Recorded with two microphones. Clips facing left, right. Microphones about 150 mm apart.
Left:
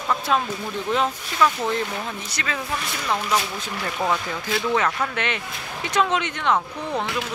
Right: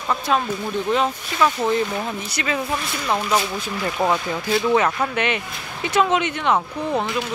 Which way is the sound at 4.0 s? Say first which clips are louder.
Right 3 dB; 15° right (ahead or behind).